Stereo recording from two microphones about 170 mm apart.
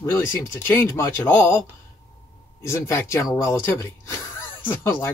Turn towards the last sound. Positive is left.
turn(degrees=15)  # may be behind; listen again after turning